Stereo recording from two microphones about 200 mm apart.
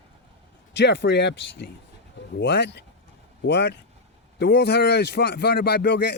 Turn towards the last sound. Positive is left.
turn(degrees=55)  # may be behind; listen again after turning